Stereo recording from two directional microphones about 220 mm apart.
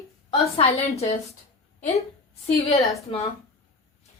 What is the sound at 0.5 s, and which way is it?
Speech, 25° left (ahead or behind).